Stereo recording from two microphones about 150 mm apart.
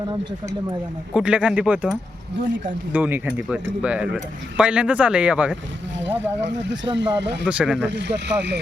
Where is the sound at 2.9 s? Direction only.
10° right (ahead or behind).